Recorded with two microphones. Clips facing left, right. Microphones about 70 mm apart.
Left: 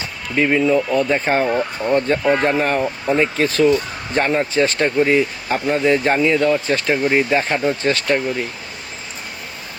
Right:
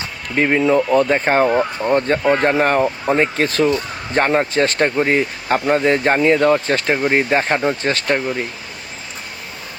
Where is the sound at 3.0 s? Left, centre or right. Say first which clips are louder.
Right 1 dB; right.